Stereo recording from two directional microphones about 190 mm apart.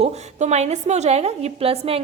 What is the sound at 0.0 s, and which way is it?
A woman's voice, 35° right (ahead or behind).